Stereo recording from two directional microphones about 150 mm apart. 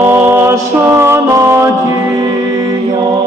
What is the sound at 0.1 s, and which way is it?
Music, 20° right (ahead or behind).